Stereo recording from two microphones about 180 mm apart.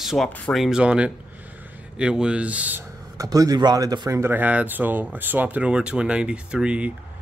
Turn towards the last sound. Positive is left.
turn(degrees=-5)  # may be behind; listen again after turning